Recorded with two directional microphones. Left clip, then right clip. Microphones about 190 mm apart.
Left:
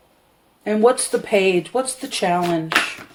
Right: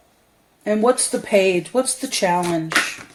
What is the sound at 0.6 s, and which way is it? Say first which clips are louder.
Speech: left 1 dB; 35° right (ahead or behind).